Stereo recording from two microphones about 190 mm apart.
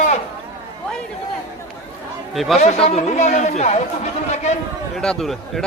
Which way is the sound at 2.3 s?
Centre (ahead or behind).